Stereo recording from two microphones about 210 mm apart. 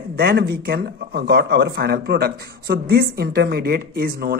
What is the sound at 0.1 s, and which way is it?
A man's voice, 50° right (ahead or behind).